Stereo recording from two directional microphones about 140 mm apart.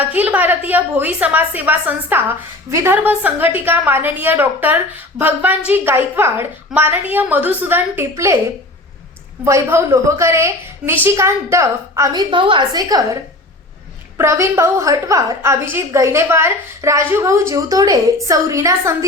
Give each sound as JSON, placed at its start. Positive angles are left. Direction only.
{"t": 0.0, "sound": "a woman's voice", "side_deg": -10}
{"t": 9.4, "sound": "a woman's voice", "side_deg": -20}
{"t": 12.3, "sound": "a woman's voice", "side_deg": -35}
{"t": 14.2, "sound": "a woman's voice", "side_deg": -20}